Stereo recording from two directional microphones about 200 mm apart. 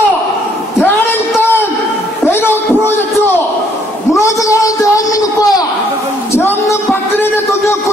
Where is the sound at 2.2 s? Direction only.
10° left (ahead or behind).